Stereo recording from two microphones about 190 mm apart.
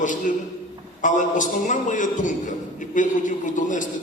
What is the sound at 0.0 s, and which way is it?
A man's voice, 45° left (ahead or behind).